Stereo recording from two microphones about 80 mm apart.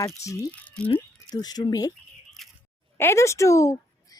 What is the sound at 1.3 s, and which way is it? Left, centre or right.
Speech, left.